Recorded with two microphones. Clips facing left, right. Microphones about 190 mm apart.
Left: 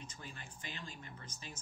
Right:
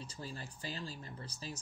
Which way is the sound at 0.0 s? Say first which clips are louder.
Right 5 dB; 35° right (ahead or behind).